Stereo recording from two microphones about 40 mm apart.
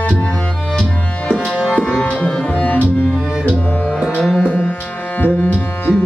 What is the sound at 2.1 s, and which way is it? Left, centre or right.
Tabla, left.